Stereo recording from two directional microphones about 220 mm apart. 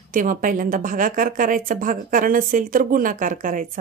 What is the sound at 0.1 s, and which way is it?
A woman's voice, 40° right (ahead or behind).